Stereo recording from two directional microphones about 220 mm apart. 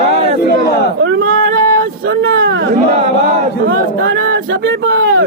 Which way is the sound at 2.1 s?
60° right (ahead or behind).